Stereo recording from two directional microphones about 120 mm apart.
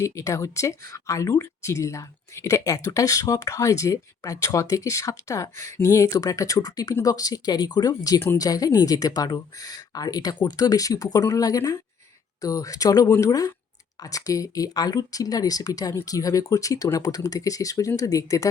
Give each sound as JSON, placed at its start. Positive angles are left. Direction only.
{"t": 0.0, "sound": "speech", "side_deg": 25}